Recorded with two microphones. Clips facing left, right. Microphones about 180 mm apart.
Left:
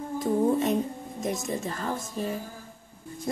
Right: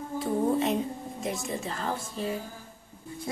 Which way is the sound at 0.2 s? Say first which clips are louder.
Left 2 dB; 45° left (ahead or behind).